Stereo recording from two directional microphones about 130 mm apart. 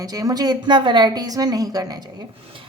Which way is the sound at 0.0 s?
25° right (ahead or behind).